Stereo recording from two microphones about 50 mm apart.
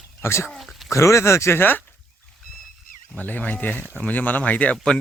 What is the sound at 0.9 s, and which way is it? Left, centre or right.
Speech, left.